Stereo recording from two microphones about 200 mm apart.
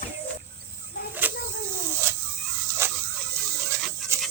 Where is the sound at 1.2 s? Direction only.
10° right (ahead or behind).